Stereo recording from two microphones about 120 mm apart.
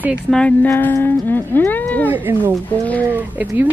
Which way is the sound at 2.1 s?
15° right (ahead or behind).